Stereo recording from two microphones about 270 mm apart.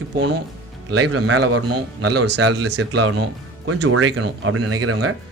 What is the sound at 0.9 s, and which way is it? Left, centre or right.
Speech, right.